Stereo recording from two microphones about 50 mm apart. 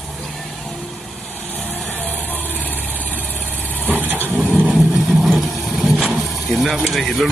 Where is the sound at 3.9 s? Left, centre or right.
Right.